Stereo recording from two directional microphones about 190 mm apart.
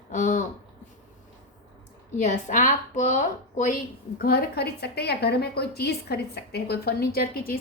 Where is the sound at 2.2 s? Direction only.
40° left (ahead or behind).